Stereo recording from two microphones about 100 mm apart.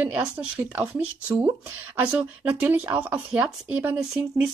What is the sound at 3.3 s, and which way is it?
Speech, 10° right (ahead or behind).